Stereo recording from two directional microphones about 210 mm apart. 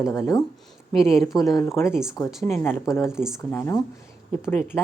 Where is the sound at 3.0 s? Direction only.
5° right (ahead or behind).